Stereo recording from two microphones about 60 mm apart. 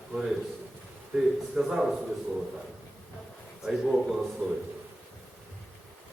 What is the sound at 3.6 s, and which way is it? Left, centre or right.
Speech, centre.